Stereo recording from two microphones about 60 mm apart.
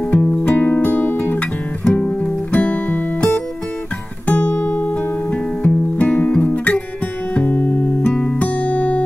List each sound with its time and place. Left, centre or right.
0.0 s music: centre
2.0 s music: left
4.3 s music: left